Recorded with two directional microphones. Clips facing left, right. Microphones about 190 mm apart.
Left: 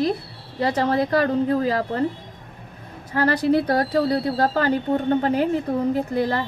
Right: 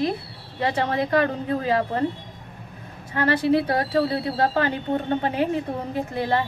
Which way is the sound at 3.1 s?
40° left (ahead or behind).